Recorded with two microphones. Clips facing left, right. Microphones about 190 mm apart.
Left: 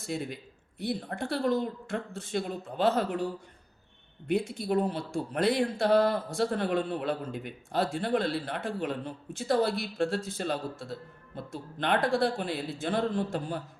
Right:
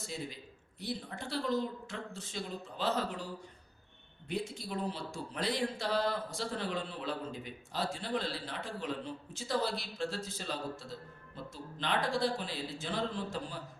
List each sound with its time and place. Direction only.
0.1 s speech: 60° left (ahead or behind)
4.3 s speech: 60° left (ahead or behind)